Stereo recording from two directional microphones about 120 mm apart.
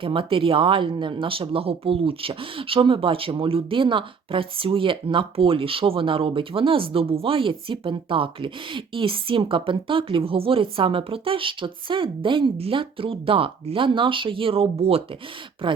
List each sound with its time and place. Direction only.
0.0 s speech: 45° right (ahead or behind)